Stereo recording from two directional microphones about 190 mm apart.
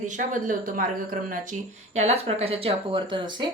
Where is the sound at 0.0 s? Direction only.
40° right (ahead or behind).